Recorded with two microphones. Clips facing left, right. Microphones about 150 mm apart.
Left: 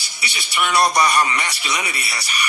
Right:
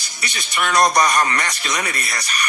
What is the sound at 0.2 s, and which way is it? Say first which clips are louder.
Speech: even; 10° left (ahead or behind).